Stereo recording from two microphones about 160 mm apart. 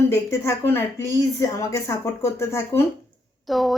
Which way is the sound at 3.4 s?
Centre (ahead or behind).